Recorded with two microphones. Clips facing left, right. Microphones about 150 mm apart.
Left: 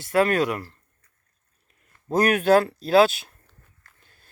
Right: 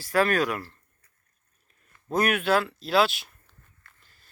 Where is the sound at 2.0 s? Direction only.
35° left (ahead or behind).